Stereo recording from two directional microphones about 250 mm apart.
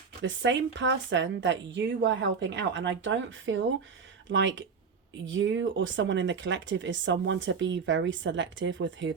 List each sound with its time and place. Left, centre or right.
0.2 s speech: right